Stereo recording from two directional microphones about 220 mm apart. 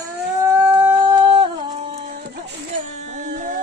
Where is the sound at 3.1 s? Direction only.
35° right (ahead or behind).